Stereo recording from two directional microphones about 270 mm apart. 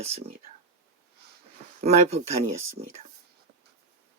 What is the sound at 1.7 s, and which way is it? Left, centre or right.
Speech, right.